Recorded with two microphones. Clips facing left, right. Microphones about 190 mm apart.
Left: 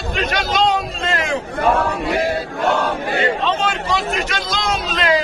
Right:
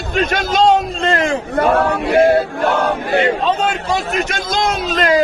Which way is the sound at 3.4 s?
45° right (ahead or behind).